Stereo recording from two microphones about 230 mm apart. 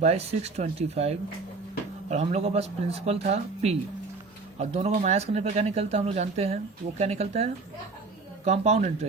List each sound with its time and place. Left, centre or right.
0.0 s speech: right